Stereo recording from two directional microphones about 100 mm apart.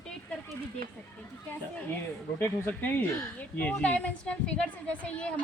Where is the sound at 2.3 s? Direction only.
20° left (ahead or behind).